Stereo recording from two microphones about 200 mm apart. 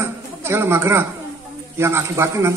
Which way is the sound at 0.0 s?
10° right (ahead or behind).